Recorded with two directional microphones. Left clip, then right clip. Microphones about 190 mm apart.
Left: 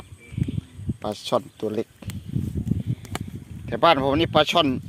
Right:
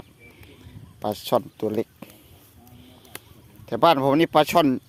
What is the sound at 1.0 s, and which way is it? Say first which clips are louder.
Speech: right 2 dB; 20° right (ahead or behind).